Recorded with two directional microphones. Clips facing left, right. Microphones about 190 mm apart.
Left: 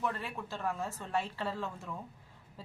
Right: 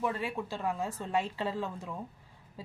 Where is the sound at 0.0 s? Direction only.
15° right (ahead or behind).